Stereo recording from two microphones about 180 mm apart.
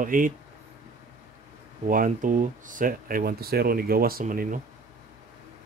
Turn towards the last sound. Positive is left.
turn(degrees=-50)  # may be behind; listen again after turning